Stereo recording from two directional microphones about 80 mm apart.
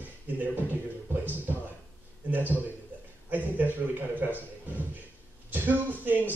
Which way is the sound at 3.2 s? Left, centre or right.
Right.